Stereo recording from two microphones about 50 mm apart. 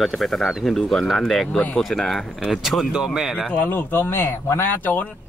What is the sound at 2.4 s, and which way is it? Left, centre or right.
Speech, centre.